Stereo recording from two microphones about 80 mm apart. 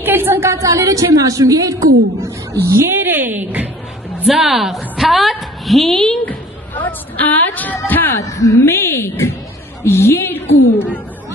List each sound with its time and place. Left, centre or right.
0.0 s a woman's voice: right
2.6 s speech: right
4.3 s a woman's voice: centre
6.2 s a woman's voice: left
8.2 s a woman's voice: left
8.7 s a woman's voice: left